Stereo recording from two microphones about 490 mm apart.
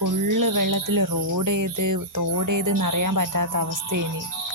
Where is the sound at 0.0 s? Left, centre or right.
Right.